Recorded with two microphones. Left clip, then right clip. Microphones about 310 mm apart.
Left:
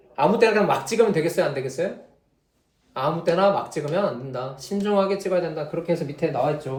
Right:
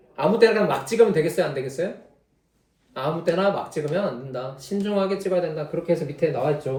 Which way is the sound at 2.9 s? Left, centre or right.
Centre.